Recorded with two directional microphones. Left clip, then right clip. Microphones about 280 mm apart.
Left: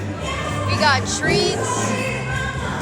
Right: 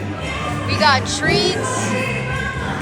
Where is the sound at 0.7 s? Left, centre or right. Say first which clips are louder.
Right 3 dB; centre.